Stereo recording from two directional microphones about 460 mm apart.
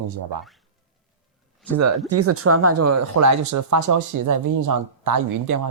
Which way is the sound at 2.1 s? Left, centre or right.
Right.